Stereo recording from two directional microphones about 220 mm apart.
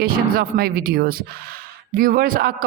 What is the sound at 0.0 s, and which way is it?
A woman's voice, 40° right (ahead or behind).